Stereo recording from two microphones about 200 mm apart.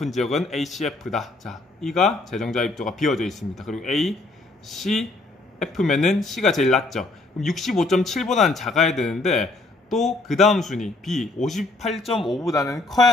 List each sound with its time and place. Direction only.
0.0 s speech: centre (ahead or behind)
12.4 s speech: 15° left (ahead or behind)
12.6 s speech: centre (ahead or behind)